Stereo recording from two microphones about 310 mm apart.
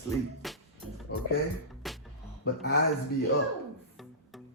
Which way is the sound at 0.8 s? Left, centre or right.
Right.